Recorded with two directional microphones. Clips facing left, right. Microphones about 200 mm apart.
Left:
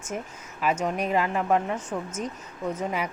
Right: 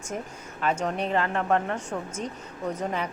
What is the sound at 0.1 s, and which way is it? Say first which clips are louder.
Speech: even; 5° left (ahead or behind).